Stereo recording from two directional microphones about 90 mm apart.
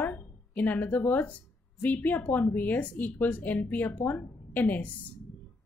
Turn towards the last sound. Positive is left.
turn(degrees=20)  # may be behind; listen again after turning